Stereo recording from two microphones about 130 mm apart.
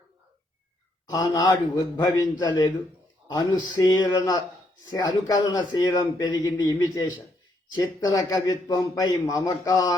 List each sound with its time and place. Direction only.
1.1 s a man's voice: 35° left (ahead or behind)
3.8 s a man's voice: 30° left (ahead or behind)